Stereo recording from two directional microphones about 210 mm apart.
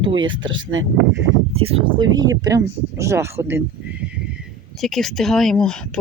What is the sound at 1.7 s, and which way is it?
Speech, 25° right (ahead or behind).